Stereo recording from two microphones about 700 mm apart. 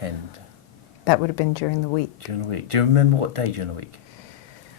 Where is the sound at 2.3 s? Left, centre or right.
Right.